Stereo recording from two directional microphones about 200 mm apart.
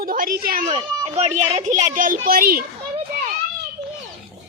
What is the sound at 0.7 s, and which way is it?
A woman's voice, 30° right (ahead or behind).